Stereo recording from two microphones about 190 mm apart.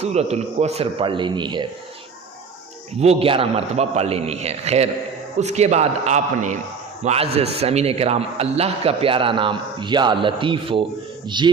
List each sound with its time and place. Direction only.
0.0 s a man's voice: 35° right (ahead or behind)
3.0 s a man's voice: 30° right (ahead or behind)